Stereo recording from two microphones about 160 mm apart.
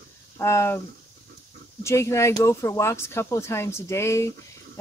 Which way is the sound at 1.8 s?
15° left (ahead or behind).